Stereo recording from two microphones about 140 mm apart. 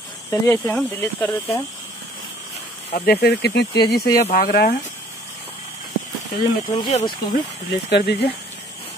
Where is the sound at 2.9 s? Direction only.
90° left.